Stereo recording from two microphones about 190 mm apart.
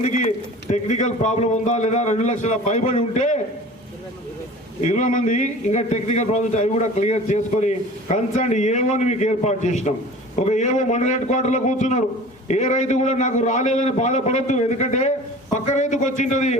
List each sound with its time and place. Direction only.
0.0 s a man's voice: 35° left (ahead or behind)
4.8 s a man's voice: 40° left (ahead or behind)